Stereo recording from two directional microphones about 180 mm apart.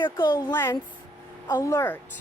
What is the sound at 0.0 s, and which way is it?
A woman's voice, 20° left (ahead or behind).